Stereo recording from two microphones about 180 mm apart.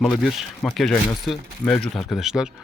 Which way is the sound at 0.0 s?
Centre (ahead or behind).